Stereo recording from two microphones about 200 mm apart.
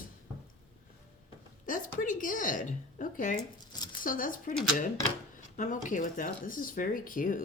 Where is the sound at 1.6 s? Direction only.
40° left (ahead or behind).